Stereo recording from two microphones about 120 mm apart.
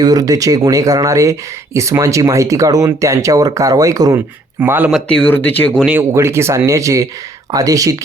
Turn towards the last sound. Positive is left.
turn(degrees=-30)  # may be behind; listen again after turning